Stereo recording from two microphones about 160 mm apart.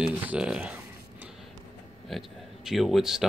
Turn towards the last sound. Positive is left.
turn(degrees=0)  # may be behind; listen again after turning